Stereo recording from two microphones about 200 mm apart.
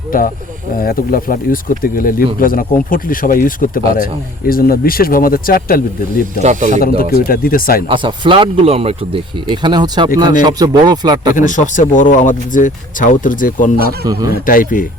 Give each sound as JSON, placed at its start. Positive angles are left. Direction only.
{"t": 0.1, "sound": "speech", "side_deg": 45}
{"t": 6.4, "sound": "speech", "side_deg": -40}
{"t": 6.8, "sound": "speech", "side_deg": 45}
{"t": 7.9, "sound": "speech", "side_deg": -25}
{"t": 11.3, "sound": "speech", "side_deg": 40}